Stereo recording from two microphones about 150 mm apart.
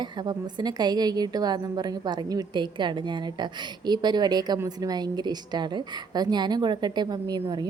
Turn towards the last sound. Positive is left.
turn(degrees=-30)  # may be behind; listen again after turning